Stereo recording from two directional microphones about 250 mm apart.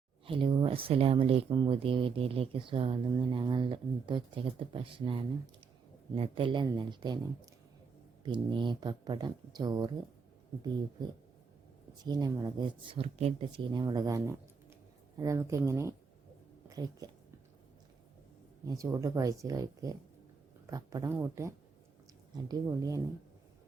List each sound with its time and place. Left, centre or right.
0.3 s speech: right
8.2 s speech: centre
12.0 s a woman's voice: centre
18.7 s speech: centre